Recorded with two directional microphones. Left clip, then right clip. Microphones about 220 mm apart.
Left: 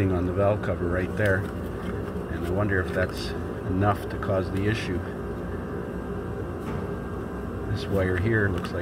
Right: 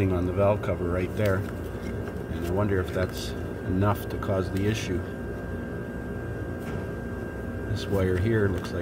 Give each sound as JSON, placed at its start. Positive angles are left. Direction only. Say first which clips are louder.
{"t": 0.0, "sound": "speech", "louder": "even", "side_deg": -5}
{"t": 2.6, "sound": "speech", "louder": "left 2 dB", "side_deg": -10}
{"t": 8.0, "sound": "speech", "louder": "left 1 dB", "side_deg": -10}